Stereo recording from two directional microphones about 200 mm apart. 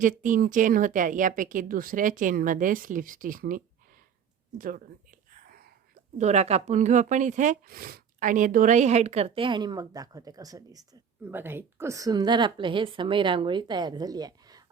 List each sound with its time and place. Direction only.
0.0 s speech: 40° right (ahead or behind)
5.3 s whispering: 45° right (ahead or behind)
6.1 s a woman's voice: 35° right (ahead or behind); by 14.6 s 20° right (ahead or behind)